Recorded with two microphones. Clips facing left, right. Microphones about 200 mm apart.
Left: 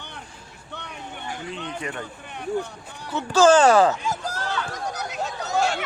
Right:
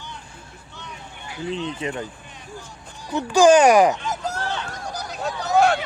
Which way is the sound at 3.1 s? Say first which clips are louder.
Right 2 dB; 15° right (ahead or behind).